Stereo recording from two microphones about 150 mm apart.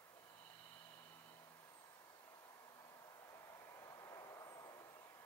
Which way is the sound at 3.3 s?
20° left (ahead or behind).